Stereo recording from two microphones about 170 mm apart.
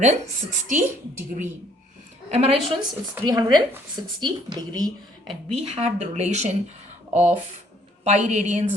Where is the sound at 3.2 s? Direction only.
25° right (ahead or behind).